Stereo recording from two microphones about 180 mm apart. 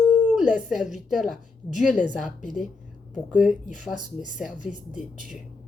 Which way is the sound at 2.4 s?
45° left (ahead or behind).